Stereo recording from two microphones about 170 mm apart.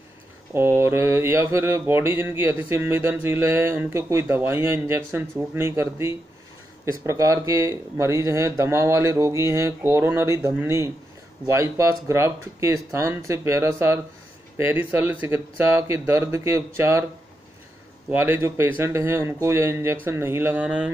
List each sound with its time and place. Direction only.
0.6 s mantra: 15° right (ahead or behind)
18.1 s mantra: 15° right (ahead or behind)